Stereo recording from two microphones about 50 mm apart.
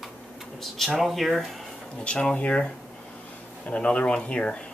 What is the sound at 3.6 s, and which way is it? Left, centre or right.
Speech, left.